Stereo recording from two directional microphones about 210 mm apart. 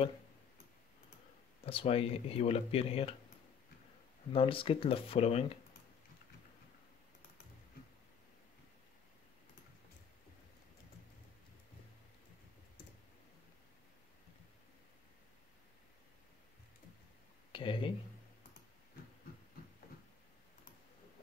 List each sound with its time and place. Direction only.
1.6 s speech: 25° left (ahead or behind)
4.3 s speech: 25° left (ahead or behind)
17.5 s speech: 25° left (ahead or behind)